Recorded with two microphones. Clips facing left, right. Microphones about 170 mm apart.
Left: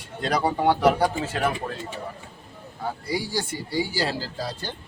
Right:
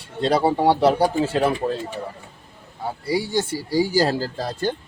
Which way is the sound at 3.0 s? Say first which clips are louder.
Right 7 dB; 25° right (ahead or behind).